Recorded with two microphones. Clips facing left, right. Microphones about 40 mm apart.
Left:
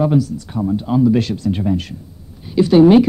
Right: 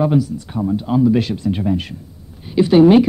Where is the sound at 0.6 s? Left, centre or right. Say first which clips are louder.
Even; centre.